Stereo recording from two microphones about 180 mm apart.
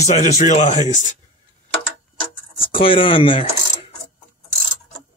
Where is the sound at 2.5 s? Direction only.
30° left (ahead or behind).